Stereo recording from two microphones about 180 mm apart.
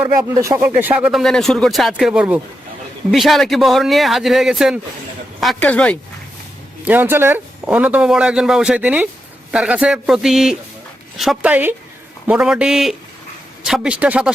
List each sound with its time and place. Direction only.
0.2 s speech: 20° right (ahead or behind); by 6.0 s 5° left (ahead or behind)
6.8 s speech: 10° right (ahead or behind)